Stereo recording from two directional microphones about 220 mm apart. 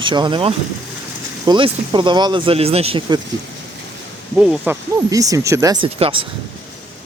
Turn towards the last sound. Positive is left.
turn(degrees=-25)  # may be behind; listen again after turning